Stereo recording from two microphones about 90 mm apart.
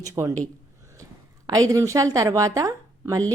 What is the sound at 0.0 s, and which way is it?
Speech, 35° right (ahead or behind).